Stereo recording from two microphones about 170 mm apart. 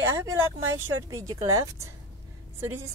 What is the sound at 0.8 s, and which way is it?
A woman's voice, 15° right (ahead or behind).